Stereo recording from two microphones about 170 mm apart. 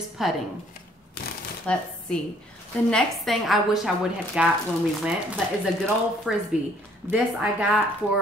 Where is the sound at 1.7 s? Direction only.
5° left (ahead or behind).